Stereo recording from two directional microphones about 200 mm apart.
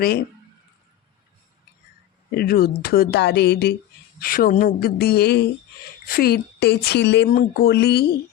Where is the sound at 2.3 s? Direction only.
50° left (ahead or behind).